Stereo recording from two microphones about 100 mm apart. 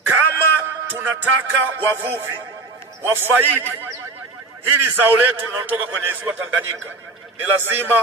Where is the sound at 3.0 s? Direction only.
20° right (ahead or behind).